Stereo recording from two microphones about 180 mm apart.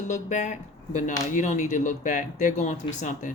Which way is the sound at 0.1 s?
40° left (ahead or behind).